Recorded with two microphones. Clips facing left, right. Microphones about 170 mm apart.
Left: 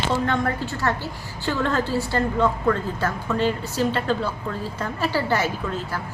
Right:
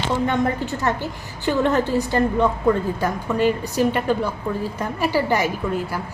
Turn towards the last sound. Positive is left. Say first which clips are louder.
# right 4 dB
turn(degrees=-15)  # may be behind; listen again after turning